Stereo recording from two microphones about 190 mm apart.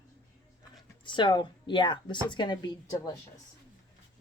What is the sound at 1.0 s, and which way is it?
A woman's voice, 25° left (ahead or behind).